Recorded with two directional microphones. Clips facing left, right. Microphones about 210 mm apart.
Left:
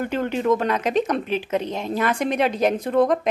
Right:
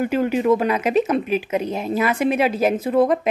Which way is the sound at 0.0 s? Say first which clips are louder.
Right 4 dB; 10° right (ahead or behind).